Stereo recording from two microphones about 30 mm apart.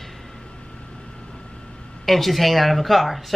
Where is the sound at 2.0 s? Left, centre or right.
Centre.